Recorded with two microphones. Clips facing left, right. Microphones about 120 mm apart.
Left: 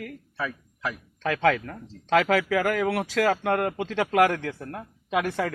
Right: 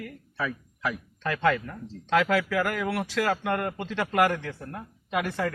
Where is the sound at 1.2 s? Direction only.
90° left.